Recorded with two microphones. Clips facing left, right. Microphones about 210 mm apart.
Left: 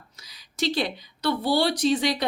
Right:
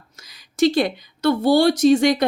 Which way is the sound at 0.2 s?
50° right (ahead or behind).